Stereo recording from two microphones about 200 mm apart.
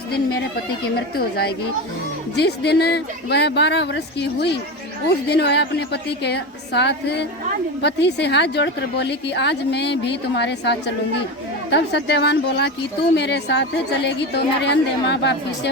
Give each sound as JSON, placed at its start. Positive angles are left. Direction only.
{"t": 0.9, "sound": "speech", "side_deg": 50}